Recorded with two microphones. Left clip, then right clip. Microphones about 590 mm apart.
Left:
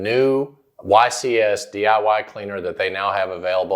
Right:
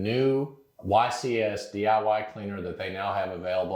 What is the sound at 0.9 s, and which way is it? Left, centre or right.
Speech, left.